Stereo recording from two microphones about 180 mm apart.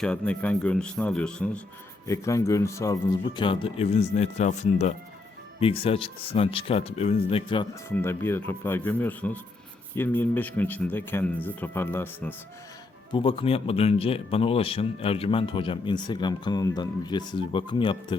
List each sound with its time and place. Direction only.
0.0 s speech: 5° left (ahead or behind)
2.0 s speech: 15° left (ahead or behind)
7.9 s speech: 10° left (ahead or behind)
13.1 s speech: 30° left (ahead or behind)